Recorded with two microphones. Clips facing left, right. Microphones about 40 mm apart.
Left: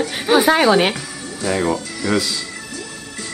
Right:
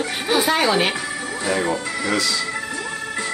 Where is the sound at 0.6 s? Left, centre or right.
Centre.